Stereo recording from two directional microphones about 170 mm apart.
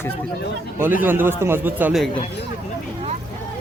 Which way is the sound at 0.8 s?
10° right (ahead or behind).